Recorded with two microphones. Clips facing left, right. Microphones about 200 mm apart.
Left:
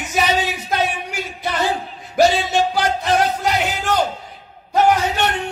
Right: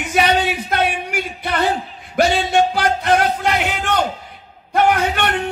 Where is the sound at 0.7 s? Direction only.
65° right (ahead or behind).